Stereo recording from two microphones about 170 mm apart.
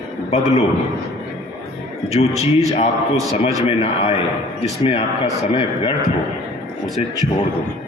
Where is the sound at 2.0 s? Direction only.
40° left (ahead or behind).